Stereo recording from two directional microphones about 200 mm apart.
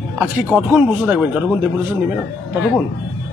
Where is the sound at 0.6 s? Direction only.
5° right (ahead or behind).